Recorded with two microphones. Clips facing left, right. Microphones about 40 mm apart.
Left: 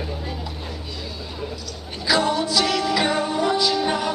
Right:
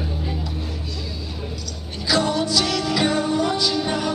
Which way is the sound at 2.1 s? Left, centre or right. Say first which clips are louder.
Even; centre.